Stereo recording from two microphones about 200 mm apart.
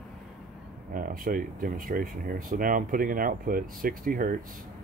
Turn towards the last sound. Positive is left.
turn(degrees=-45)  # may be behind; listen again after turning